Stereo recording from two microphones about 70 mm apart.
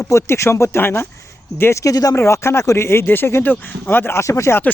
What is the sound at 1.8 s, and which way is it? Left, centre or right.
Speech, left.